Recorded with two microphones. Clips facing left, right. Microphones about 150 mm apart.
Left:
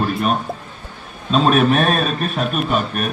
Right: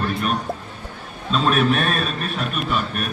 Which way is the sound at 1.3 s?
45° left (ahead or behind).